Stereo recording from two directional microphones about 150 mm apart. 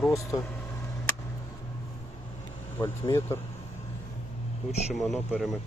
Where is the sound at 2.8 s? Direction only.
15° left (ahead or behind).